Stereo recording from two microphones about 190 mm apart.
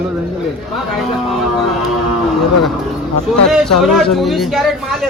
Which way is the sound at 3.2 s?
Centre (ahead or behind).